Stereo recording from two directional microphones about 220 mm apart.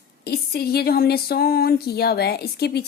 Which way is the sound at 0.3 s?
45° left (ahead or behind).